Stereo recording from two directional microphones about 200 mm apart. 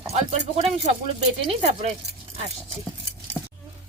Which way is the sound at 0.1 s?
35° right (ahead or behind).